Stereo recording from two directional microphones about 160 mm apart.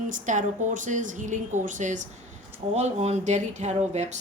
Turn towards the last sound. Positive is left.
turn(degrees=-45)  # may be behind; listen again after turning